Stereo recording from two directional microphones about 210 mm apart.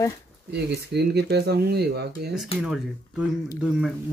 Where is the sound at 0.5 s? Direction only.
50° right (ahead or behind).